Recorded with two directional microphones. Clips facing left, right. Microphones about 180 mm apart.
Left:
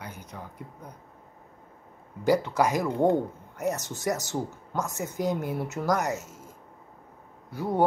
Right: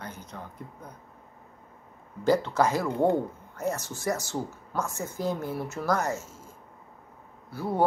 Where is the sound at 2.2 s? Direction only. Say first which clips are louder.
Even; 15° left (ahead or behind).